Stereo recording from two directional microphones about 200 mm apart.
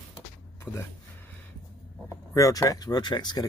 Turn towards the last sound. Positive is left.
turn(degrees=20)  # may be behind; listen again after turning